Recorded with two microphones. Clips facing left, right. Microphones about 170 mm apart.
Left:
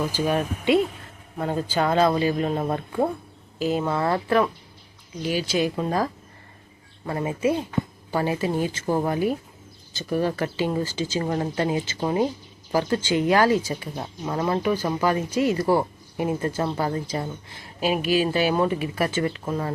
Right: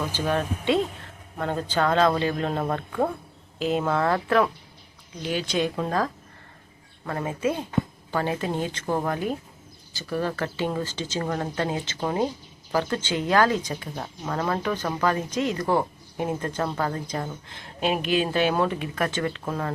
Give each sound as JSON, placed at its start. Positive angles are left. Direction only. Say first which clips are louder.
{"t": 0.1, "sound": "speech", "louder": "left 2 dB", "side_deg": 10}
{"t": 3.6, "sound": "speech", "louder": "even", "side_deg": 0}